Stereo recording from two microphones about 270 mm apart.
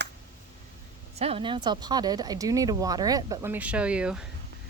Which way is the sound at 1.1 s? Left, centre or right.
Right.